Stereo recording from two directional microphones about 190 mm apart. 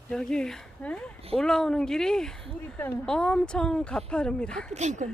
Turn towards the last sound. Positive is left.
turn(degrees=-40)  # may be behind; listen again after turning